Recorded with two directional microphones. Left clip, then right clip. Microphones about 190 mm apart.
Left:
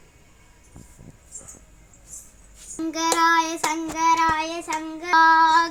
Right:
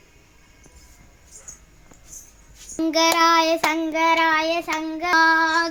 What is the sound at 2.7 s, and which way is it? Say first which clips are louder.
Child singing: right 4 dB; 45° right (ahead or behind).